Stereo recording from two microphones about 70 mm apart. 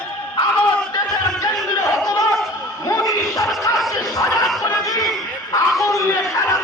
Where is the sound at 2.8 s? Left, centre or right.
Left.